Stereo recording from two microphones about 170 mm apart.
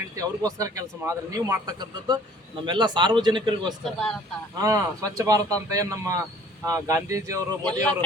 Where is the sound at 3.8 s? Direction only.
5° left (ahead or behind).